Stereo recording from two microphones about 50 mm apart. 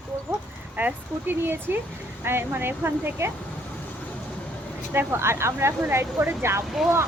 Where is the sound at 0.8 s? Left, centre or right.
Right.